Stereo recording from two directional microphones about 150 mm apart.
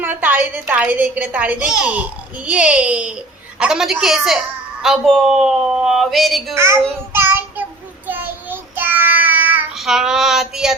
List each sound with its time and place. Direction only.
0.0 s a woman's voice: 10° right (ahead or behind)
7.1 s child singing: 15° right (ahead or behind)